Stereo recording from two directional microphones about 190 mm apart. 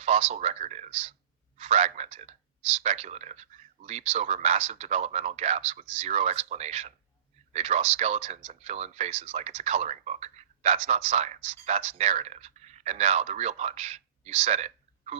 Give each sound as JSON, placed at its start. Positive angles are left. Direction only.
{"t": 0.0, "sound": "speech", "side_deg": -35}